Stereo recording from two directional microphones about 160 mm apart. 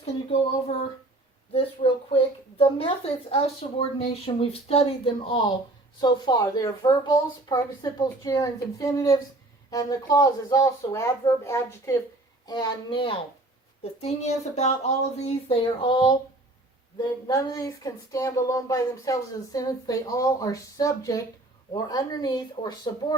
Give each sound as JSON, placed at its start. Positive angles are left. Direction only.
{"t": 1.5, "sound": "a woman's voice", "side_deg": 35}
{"t": 12.5, "sound": "speech", "side_deg": 25}
{"t": 14.0, "sound": "speech", "side_deg": 45}
{"t": 15.4, "sound": "speech", "side_deg": 35}